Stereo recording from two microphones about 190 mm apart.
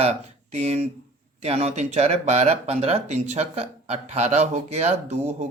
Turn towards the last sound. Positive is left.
turn(degrees=-35)  # may be behind; listen again after turning